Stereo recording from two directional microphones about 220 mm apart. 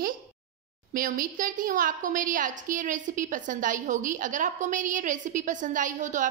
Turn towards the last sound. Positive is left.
turn(degrees=-35)  # may be behind; listen again after turning